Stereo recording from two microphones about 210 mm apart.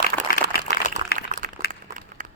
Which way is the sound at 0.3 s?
40° left (ahead or behind).